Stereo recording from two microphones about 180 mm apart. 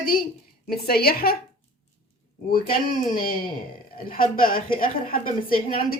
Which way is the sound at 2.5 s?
50° left (ahead or behind).